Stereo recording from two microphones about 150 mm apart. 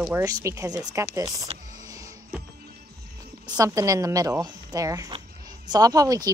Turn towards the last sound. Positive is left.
turn(degrees=-25)  # may be behind; listen again after turning